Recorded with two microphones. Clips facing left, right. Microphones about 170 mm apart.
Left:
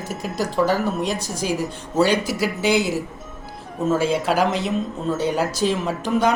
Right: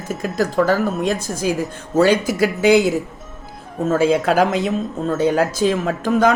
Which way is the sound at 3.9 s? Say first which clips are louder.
Right 5 dB; 50° right (ahead or behind).